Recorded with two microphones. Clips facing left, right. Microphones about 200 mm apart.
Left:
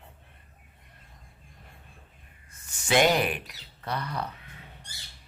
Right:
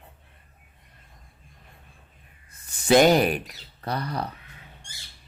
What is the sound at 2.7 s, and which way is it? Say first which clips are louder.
Speech: right 6 dB; 40° right (ahead or behind).